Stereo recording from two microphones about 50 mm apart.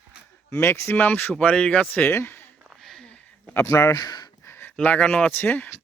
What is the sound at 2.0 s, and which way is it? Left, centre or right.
Speech, left.